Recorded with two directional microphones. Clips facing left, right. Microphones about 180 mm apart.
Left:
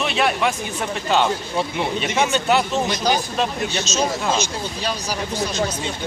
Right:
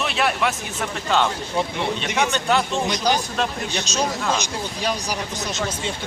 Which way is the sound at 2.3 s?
5° left (ahead or behind).